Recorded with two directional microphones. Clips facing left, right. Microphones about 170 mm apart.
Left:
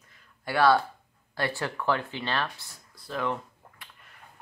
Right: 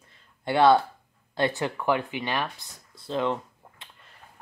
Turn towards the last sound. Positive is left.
turn(degrees=-20)  # may be behind; listen again after turning